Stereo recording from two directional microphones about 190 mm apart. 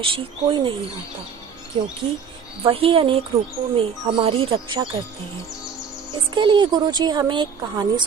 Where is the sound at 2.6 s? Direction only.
30° right (ahead or behind).